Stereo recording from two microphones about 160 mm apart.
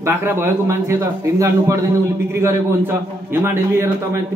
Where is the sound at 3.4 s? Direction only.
15° right (ahead or behind).